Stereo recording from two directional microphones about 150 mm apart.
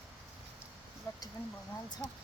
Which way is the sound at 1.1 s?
25° left (ahead or behind).